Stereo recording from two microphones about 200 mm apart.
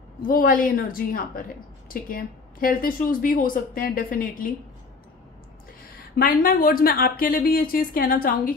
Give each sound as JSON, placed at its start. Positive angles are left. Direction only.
{"t": 0.3, "sound": "a woman's voice", "side_deg": 45}
{"t": 6.1, "sound": "a woman's voice", "side_deg": 50}